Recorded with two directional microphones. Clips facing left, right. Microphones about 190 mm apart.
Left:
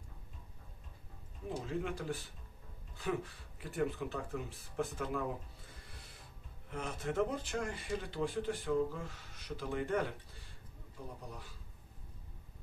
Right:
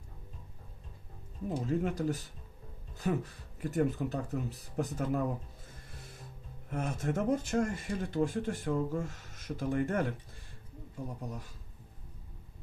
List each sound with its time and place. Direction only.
1.7 s speech: 40° right (ahead or behind)
5.7 s music: 45° right (ahead or behind)
6.7 s speech: 45° right (ahead or behind)
11.1 s speech: 45° right (ahead or behind)